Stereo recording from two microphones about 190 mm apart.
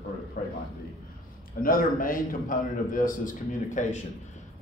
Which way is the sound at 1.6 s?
45° left (ahead or behind).